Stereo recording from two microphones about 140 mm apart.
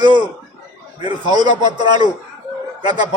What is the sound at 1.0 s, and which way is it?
A man's voice, 30° right (ahead or behind).